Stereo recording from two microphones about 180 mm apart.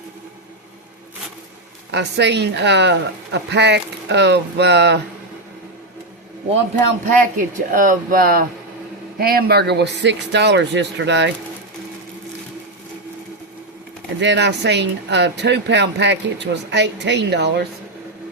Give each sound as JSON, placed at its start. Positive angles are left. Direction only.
{"t": 1.9, "sound": "speech", "side_deg": -70}
{"t": 7.0, "sound": "speech", "side_deg": -45}
{"t": 14.2, "sound": "speech", "side_deg": -75}